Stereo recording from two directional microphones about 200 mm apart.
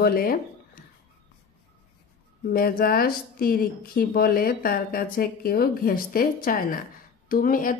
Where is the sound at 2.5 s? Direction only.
50° left (ahead or behind).